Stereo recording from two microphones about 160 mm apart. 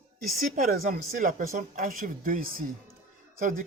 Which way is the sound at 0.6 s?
60° right (ahead or behind).